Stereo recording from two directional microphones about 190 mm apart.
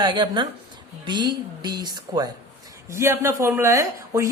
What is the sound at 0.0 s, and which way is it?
Speech, 25° right (ahead or behind).